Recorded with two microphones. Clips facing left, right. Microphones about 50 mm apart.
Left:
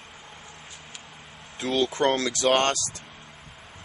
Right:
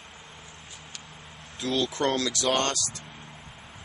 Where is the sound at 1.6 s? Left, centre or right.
Left.